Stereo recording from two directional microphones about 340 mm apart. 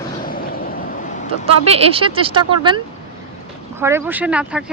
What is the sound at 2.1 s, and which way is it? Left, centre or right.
Speech, centre.